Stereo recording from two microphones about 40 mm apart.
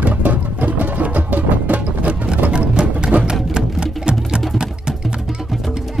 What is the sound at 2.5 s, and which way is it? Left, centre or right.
Sewing machine, right.